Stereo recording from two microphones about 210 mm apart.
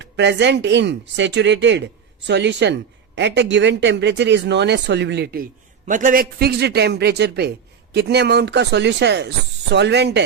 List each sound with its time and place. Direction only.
0.0 s speech: 55° right (ahead or behind)